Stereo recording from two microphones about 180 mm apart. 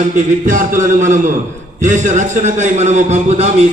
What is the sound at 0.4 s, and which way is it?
A man's voice, 45° right (ahead or behind).